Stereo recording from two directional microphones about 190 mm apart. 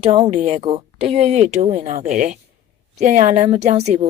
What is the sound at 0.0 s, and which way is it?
A woman's voice, 30° right (ahead or behind).